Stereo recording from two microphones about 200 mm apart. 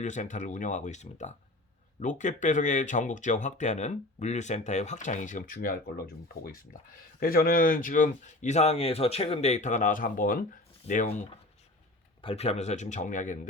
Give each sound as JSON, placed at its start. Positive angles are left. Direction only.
{"t": 0.0, "sound": "speech", "side_deg": 35}
{"t": 7.2, "sound": "speech", "side_deg": 45}